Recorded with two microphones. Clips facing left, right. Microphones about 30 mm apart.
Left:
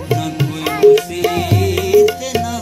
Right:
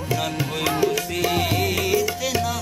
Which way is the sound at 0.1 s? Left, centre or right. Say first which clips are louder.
Left 6 dB; centre.